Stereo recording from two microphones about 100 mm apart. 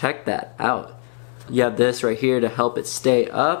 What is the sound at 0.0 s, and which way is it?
Speech, 15° left (ahead or behind).